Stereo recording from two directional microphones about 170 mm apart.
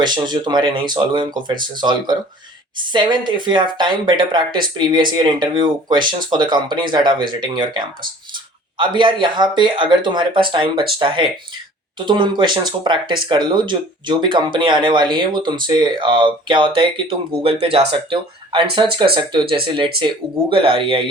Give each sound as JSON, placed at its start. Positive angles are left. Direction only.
{"t": 0.0, "sound": "speech", "side_deg": -25}